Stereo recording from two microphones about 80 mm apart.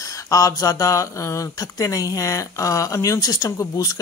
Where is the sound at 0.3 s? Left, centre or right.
Left.